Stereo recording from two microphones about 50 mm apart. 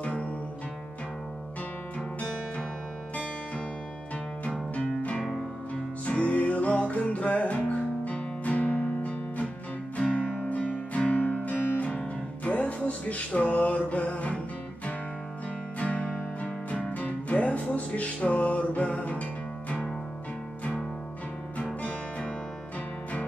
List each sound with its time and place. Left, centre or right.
4.7 s music: left
15.8 s music: left